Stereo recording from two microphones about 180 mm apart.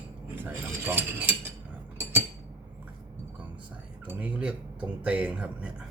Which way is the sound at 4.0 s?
10° right (ahead or behind).